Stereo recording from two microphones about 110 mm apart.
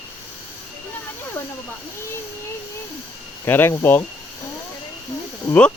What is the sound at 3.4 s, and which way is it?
Speech, 20° left (ahead or behind).